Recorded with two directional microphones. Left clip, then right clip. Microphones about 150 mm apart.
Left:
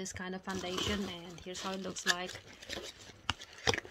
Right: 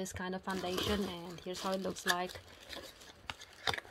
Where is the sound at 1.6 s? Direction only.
40° right (ahead or behind).